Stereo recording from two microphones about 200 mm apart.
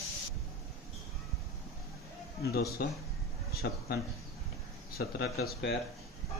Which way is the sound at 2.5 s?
50° left (ahead or behind).